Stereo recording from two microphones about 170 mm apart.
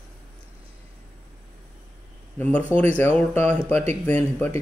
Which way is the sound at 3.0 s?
10° left (ahead or behind).